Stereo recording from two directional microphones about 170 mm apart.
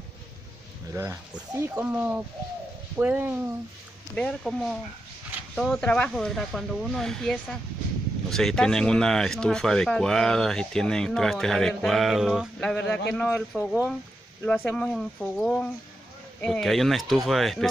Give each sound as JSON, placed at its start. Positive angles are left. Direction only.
{"t": 0.9, "sound": "speech", "side_deg": -20}
{"t": 4.1, "sound": "speech", "side_deg": 5}
{"t": 13.6, "sound": "speech", "side_deg": -10}
{"t": 14.4, "sound": "speech", "side_deg": 10}